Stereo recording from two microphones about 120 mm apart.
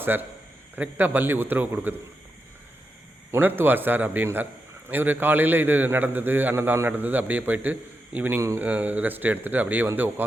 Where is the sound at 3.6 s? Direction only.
15° right (ahead or behind).